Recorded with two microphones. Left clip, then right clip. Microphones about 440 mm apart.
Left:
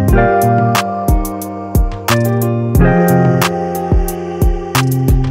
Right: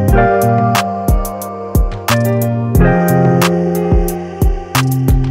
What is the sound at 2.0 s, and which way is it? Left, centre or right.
Music, centre.